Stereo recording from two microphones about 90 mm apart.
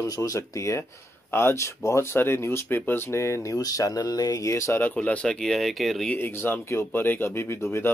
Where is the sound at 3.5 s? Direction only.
40° left (ahead or behind).